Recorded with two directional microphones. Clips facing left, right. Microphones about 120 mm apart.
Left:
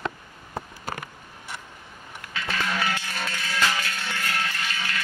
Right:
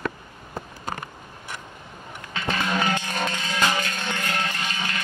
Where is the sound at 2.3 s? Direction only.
20° right (ahead or behind).